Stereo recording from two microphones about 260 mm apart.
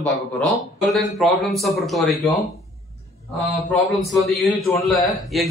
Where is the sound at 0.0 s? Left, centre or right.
Centre.